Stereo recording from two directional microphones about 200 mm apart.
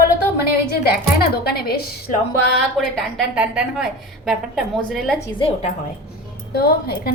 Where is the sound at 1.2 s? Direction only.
50° left (ahead or behind).